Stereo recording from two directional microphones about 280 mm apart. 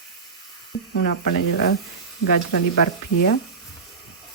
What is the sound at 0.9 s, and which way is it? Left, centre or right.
Speech, left.